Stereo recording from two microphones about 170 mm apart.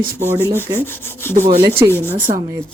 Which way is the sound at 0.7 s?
15° left (ahead or behind).